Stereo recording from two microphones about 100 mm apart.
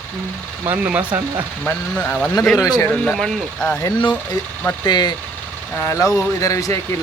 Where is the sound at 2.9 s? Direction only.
5° left (ahead or behind).